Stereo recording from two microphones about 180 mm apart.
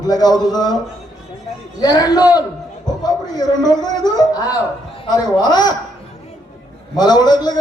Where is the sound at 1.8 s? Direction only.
20° left (ahead or behind).